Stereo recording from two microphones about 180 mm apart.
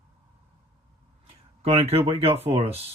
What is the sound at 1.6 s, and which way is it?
Speech, 35° right (ahead or behind).